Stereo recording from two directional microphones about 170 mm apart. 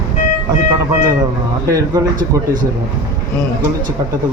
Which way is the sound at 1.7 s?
20° right (ahead or behind).